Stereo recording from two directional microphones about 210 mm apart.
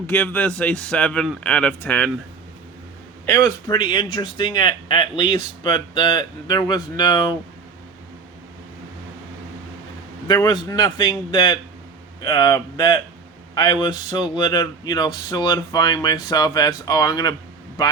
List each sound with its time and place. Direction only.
0.1 s speech: 5° left (ahead or behind)
3.2 s speech: 15° left (ahead or behind)
10.2 s speech: 20° left (ahead or behind)